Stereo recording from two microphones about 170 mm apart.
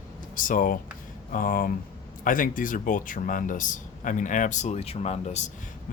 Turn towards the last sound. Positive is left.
turn(degrees=40)  # may be behind; listen again after turning